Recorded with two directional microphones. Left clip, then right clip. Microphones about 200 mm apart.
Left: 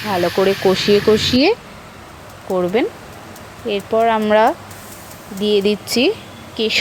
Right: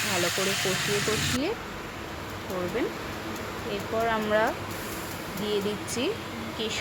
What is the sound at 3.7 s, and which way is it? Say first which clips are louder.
Speech: left 12 dB; 25° left (ahead or behind).